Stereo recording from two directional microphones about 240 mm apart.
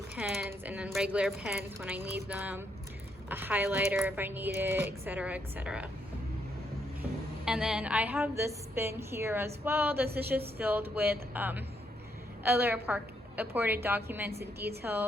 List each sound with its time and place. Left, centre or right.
0.2 s a woman's voice: centre
7.4 s a woman's voice: centre